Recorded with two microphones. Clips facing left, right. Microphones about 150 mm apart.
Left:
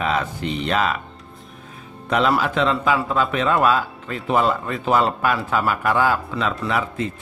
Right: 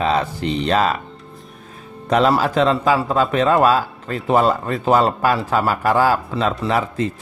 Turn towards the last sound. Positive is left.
turn(degrees=-35)  # may be behind; listen again after turning